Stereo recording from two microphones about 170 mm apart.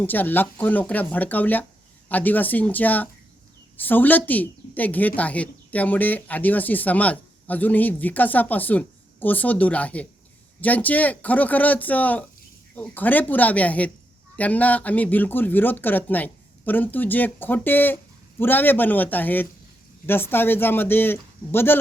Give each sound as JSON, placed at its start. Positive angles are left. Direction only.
{"t": 0.0, "sound": "a woman's voice", "side_deg": 10}